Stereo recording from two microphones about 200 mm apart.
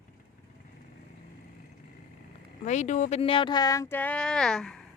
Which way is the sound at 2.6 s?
35° left (ahead or behind).